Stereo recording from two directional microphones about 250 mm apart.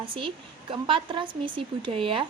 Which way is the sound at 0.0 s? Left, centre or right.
Right.